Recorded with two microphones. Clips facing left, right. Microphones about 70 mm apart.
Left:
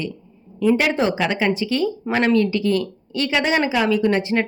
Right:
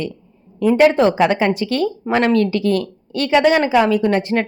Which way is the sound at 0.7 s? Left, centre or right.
Right.